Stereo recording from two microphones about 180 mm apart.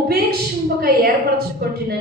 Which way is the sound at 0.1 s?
55° right (ahead or behind).